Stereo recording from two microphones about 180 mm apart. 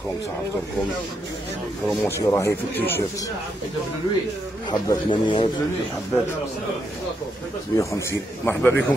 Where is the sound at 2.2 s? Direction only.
15° left (ahead or behind).